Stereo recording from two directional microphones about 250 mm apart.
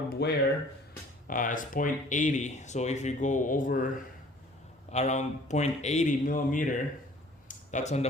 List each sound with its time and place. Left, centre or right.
0.2 s speech: left
4.9 s speech: left
7.4 s a sound: left